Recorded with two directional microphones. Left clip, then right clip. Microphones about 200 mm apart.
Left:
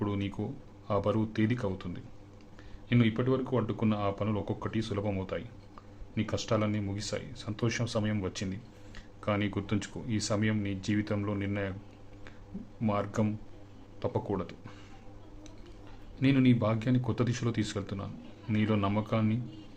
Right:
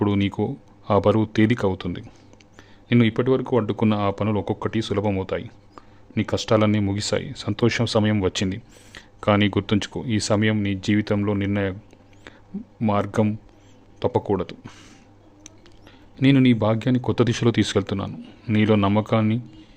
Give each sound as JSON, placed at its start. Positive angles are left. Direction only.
{"t": 0.0, "sound": "a sound", "side_deg": -50}
{"t": 0.9, "sound": "speech", "side_deg": -50}
{"t": 12.8, "sound": "speech", "side_deg": -50}
{"t": 16.1, "sound": "speech", "side_deg": -45}